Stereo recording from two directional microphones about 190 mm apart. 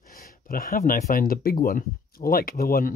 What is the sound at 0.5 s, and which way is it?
Speech, 50° left (ahead or behind).